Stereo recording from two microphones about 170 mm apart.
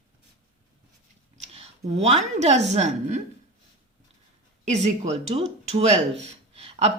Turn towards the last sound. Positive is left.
turn(degrees=-35)  # may be behind; listen again after turning